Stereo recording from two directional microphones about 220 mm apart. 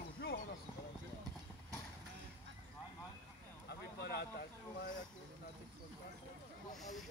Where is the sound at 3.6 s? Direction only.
45° left (ahead or behind).